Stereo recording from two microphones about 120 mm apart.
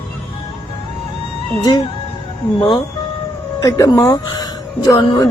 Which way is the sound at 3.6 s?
30° left (ahead or behind).